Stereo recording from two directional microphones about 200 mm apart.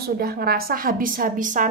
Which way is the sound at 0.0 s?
50° right (ahead or behind).